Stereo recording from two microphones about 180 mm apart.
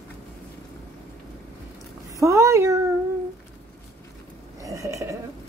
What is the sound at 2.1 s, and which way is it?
Speech, 15° right (ahead or behind).